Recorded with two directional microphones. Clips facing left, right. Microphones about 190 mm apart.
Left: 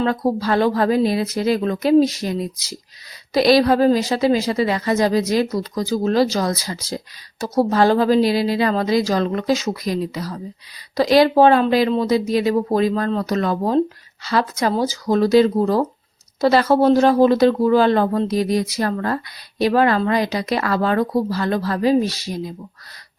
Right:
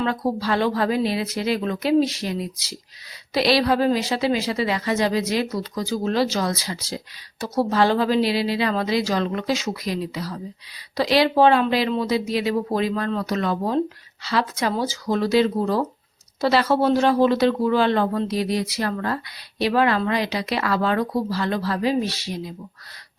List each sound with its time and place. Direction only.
0.0 s a woman's voice: 45° left (ahead or behind)